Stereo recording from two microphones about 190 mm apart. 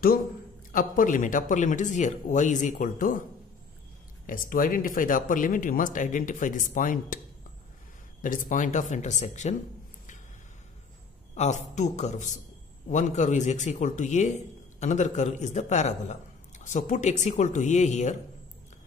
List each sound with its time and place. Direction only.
0.7 s a man's voice: 45° left (ahead or behind)
4.3 s speech: 45° left (ahead or behind)
8.2 s a man's voice: 45° left (ahead or behind)
11.3 s a man's voice: 35° left (ahead or behind)